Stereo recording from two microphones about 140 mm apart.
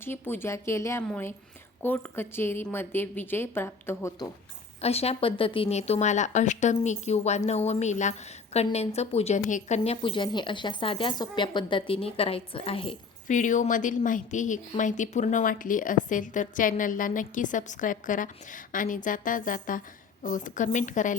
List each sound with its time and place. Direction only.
0.0 s a woman's voice: 15° left (ahead or behind)
4.8 s a woman's voice: 45° left (ahead or behind)
13.2 s a woman's voice: 65° left (ahead or behind)